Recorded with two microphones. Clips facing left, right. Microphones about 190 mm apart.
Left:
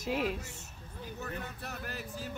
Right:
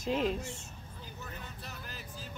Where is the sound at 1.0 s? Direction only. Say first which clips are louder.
Left 7 dB; 65° left (ahead or behind).